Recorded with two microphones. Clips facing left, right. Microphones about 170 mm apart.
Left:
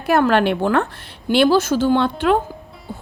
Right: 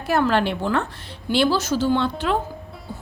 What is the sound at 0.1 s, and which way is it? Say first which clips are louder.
A woman's voice: left 4 dB; 60° left (ahead or behind).